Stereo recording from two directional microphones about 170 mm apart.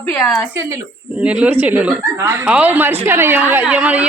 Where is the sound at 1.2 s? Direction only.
5° right (ahead or behind).